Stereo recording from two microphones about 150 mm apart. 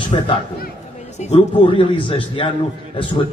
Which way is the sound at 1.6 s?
35° left (ahead or behind).